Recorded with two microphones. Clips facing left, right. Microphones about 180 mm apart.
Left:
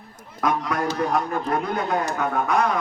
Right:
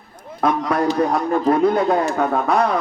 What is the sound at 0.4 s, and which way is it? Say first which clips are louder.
A man's voice: right 5 dB; 30° right (ahead or behind).